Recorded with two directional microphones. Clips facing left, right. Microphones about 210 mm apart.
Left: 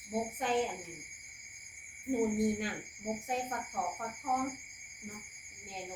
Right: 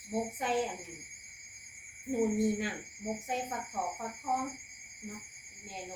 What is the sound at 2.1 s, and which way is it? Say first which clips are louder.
Speech: right 1 dB; centre (ahead or behind).